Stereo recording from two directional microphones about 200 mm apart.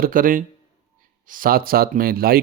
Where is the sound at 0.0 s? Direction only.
45° right (ahead or behind).